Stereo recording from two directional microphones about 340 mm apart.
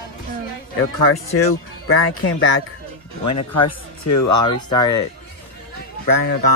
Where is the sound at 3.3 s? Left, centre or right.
Left.